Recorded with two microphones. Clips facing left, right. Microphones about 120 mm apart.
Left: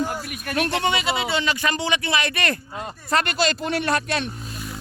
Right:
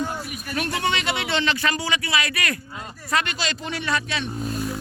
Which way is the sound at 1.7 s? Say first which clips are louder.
Left 2 dB; 25° left (ahead or behind).